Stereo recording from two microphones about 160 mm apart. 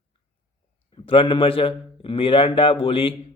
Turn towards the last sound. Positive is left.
turn(degrees=35)  # may be behind; listen again after turning